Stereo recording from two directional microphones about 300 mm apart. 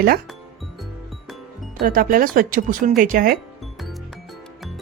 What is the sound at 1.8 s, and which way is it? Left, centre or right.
A woman's voice, right.